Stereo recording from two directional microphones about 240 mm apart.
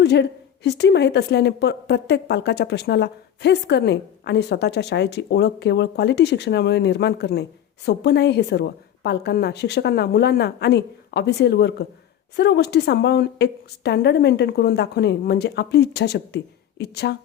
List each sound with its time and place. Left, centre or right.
0.0 s a woman's voice: left